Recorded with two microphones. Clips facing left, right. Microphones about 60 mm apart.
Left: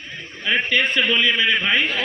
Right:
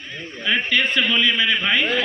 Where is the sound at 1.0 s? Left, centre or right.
Centre.